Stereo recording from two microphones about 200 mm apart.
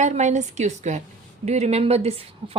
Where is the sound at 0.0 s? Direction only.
35° right (ahead or behind).